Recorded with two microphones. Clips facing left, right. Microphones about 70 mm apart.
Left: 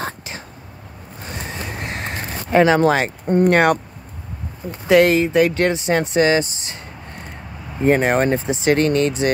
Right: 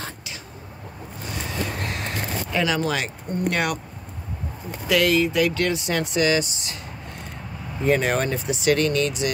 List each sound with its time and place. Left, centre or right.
1.5 s vehicle: left
2.5 s speech: left
7.8 s speech: left